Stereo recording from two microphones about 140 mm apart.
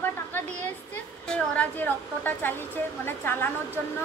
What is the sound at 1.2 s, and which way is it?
A woman's voice, 5° left (ahead or behind).